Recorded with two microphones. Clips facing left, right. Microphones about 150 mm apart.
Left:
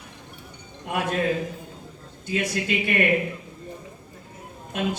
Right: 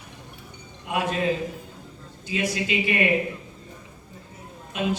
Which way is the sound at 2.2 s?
55° left (ahead or behind).